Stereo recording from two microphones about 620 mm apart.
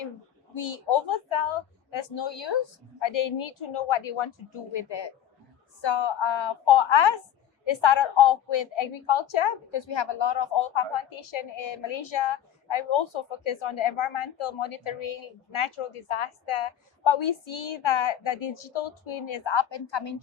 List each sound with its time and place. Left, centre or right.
0.5 s a woman's voice: left